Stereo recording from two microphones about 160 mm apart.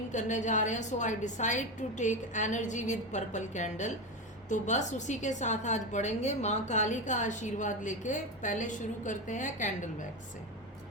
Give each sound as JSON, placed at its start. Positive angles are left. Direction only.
{"t": 0.1, "sound": "a woman's voice", "side_deg": 50}